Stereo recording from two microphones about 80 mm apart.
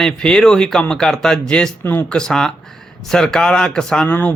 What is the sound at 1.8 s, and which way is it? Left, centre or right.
Speech, left.